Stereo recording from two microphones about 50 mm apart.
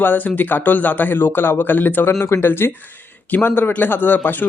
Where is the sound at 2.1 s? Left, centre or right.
Left.